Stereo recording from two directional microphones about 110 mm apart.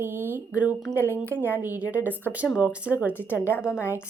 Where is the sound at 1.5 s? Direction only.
15° right (ahead or behind).